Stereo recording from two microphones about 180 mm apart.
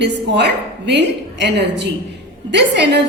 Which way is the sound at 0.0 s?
70° right (ahead or behind).